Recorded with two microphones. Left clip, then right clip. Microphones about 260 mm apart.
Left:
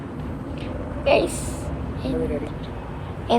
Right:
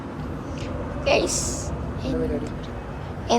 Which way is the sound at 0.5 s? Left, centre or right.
Centre.